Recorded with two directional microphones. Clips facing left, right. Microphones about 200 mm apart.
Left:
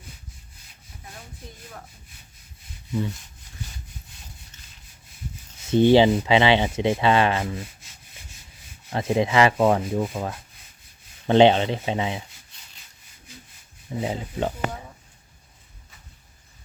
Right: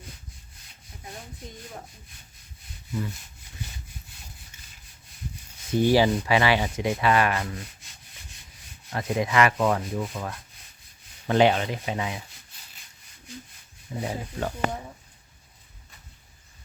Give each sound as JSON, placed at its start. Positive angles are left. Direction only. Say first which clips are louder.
{"t": 5.7, "sound": "speech", "louder": "left 5 dB", "side_deg": 25}
{"t": 8.9, "sound": "speech", "louder": "left 4 dB", "side_deg": 25}
{"t": 14.0, "sound": "speech", "louder": "left 4 dB", "side_deg": 20}